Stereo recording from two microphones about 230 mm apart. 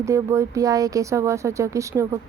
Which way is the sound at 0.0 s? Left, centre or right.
Centre.